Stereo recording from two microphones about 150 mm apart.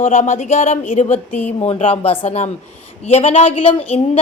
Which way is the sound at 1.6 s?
40° left (ahead or behind).